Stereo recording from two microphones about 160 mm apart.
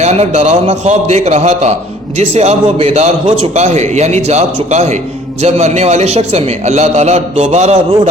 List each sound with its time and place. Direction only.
0.0 s a man's voice: 40° right (ahead or behind)